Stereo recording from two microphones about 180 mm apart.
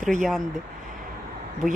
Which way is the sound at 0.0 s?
Centre (ahead or behind).